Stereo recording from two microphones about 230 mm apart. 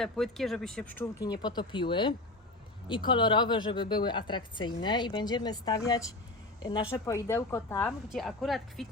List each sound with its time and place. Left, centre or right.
0.0 s a woman's voice: centre